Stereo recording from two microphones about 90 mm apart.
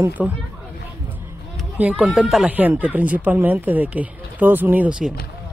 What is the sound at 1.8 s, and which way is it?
Speech, 15° right (ahead or behind).